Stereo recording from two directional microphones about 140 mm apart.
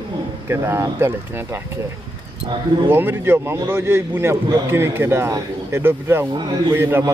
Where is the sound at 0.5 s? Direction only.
20° right (ahead or behind).